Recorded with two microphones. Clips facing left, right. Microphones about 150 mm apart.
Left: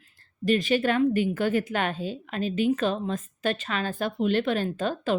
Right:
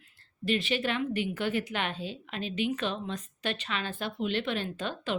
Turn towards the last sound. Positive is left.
turn(degrees=40)  # may be behind; listen again after turning